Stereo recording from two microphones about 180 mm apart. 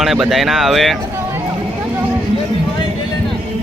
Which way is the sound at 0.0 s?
Centre (ahead or behind).